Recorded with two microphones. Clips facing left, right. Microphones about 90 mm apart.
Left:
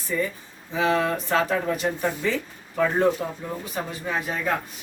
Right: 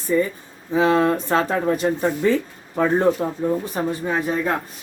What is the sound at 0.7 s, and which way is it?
Speech, 35° right (ahead or behind).